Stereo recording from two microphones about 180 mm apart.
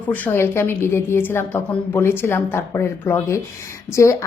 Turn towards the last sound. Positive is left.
turn(degrees=15)  # may be behind; listen again after turning